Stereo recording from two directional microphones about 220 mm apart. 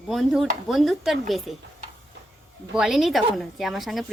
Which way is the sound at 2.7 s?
Centre (ahead or behind).